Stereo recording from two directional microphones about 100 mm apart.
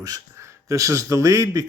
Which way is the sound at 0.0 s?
35° right (ahead or behind).